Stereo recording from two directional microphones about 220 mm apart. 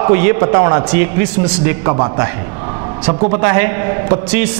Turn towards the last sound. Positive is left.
turn(degrees=-15)  # may be behind; listen again after turning